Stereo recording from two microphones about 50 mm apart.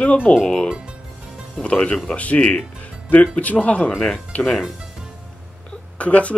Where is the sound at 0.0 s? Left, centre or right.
Left.